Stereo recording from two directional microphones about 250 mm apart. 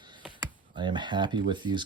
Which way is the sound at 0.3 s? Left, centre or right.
Centre.